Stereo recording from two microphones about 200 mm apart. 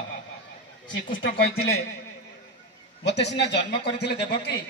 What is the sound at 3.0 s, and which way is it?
Speech, 60° left (ahead or behind).